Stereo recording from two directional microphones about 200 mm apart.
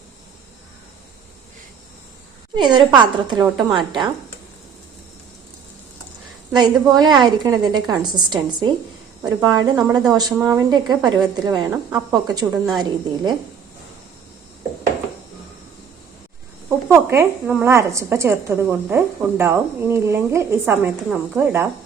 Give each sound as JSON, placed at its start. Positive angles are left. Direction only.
{"t": 2.6, "sound": "a woman's voice", "side_deg": -20}
{"t": 6.5, "sound": "a woman's voice", "side_deg": -20}
{"t": 16.6, "sound": "speech", "side_deg": -10}